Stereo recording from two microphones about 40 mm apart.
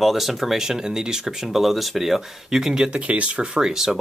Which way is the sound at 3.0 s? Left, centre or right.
Right.